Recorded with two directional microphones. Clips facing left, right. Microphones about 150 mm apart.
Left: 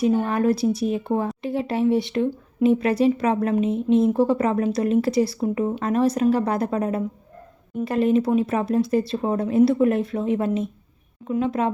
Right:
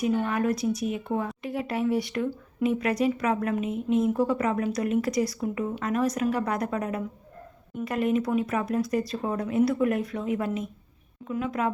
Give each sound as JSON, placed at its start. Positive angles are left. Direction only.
{"t": 0.0, "sound": "speech", "side_deg": 30}